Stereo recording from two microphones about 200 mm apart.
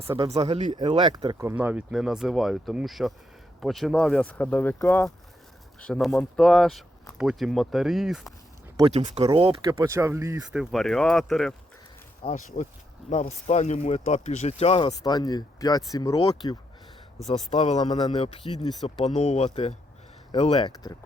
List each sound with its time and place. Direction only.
0.2 s speech: 30° right (ahead or behind); by 8.3 s centre (ahead or behind)
8.9 s speech: 30° right (ahead or behind)
9.8 s speech: 15° right (ahead or behind)
10.6 s speech: centre (ahead or behind)
12.2 s speech: 35° left (ahead or behind)
14.8 s speech: 20° left (ahead or behind)
17.5 s speech: 35° left (ahead or behind)